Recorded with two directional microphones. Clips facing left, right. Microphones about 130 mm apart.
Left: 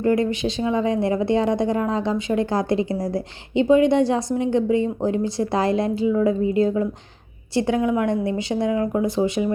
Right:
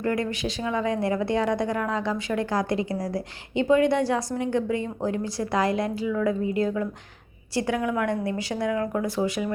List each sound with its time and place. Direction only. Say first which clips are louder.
0.0 s speech: left 6 dB; 25° left (ahead or behind)